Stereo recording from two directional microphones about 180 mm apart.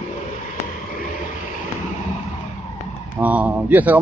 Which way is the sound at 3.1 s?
10° right (ahead or behind).